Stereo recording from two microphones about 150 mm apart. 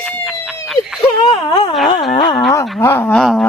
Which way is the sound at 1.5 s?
30° left (ahead or behind).